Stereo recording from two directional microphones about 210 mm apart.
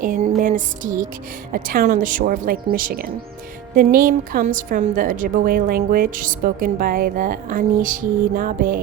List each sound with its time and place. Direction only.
0.0 s music: 40° right (ahead or behind)
1.5 s a woman's voice: 40° right (ahead or behind)